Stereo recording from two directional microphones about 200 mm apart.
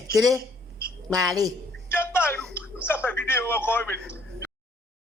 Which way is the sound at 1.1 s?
20° right (ahead or behind).